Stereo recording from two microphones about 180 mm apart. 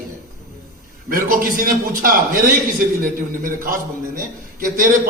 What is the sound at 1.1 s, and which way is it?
A man's voice, 50° right (ahead or behind).